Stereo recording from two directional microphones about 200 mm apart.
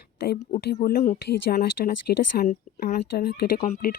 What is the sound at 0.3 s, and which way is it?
Speech, 45° left (ahead or behind).